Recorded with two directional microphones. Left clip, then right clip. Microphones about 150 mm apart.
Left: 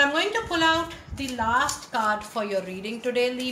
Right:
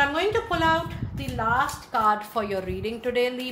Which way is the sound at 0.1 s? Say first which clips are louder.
Right 1 dB; 45° right (ahead or behind).